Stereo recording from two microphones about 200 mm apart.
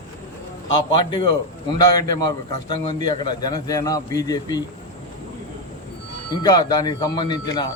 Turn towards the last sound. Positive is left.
turn(degrees=20)  # may be behind; listen again after turning